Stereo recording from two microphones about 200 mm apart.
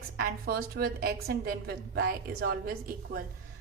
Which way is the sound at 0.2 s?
45° right (ahead or behind).